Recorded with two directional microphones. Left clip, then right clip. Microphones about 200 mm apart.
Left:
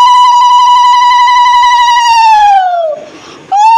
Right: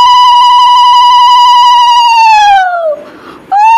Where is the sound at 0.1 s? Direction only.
25° right (ahead or behind).